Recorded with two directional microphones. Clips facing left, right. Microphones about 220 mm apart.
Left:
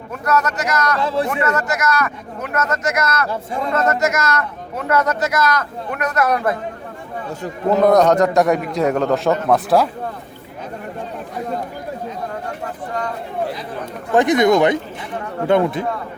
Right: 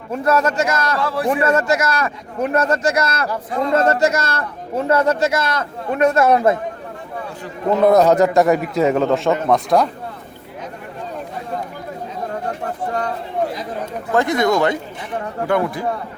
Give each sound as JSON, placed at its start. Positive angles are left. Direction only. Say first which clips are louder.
{"t": 0.1, "sound": "speech", "louder": "right 3 dB", "side_deg": -30}
{"t": 1.0, "sound": "speech", "louder": "left 1 dB", "side_deg": 20}
{"t": 1.3, "sound": "speech", "louder": "right 4 dB", "side_deg": -25}
{"t": 7.9, "sound": "a man's voice", "louder": "right 1 dB", "side_deg": -5}
{"t": 14.1, "sound": "speech", "louder": "left 3 dB", "side_deg": 20}